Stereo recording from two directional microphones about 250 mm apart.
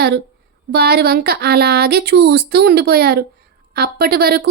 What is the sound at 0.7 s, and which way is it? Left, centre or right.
A woman's voice, right.